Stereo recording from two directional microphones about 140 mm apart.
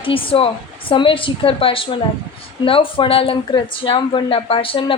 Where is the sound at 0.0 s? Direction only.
40° left (ahead or behind).